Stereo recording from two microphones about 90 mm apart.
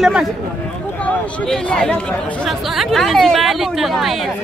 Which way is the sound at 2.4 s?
Centre (ahead or behind).